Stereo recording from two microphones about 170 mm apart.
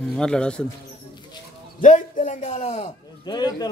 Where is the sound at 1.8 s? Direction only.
45° left (ahead or behind).